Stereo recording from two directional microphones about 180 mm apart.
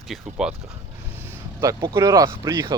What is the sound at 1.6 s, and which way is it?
Speech, 20° right (ahead or behind).